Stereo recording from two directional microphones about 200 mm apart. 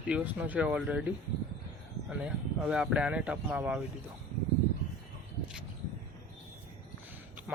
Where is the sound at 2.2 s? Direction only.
5° right (ahead or behind).